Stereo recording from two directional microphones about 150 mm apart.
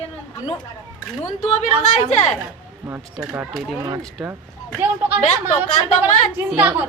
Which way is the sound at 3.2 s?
10° right (ahead or behind).